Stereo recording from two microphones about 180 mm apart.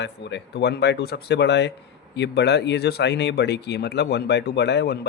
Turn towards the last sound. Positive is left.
turn(degrees=65)  # may be behind; listen again after turning